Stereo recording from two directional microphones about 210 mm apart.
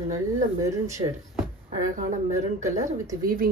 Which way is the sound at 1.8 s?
35° right (ahead or behind).